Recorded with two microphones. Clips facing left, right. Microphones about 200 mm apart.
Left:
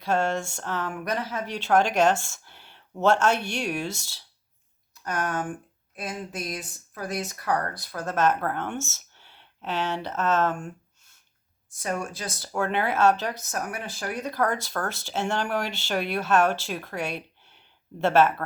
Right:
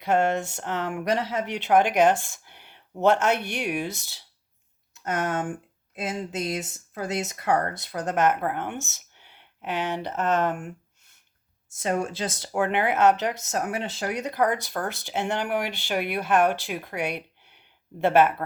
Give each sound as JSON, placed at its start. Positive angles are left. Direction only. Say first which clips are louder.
{"t": 0.0, "sound": "speech", "louder": "right 2 dB", "side_deg": -20}
{"t": 11.7, "sound": "speech", "louder": "right 4 dB", "side_deg": -25}